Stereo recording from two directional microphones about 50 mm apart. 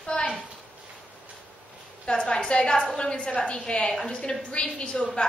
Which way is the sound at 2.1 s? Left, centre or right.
Centre.